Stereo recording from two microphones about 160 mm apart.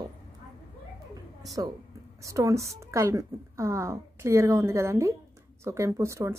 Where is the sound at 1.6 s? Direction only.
20° right (ahead or behind).